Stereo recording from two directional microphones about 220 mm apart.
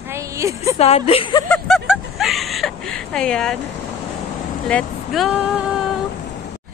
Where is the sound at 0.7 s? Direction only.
30° left (ahead or behind).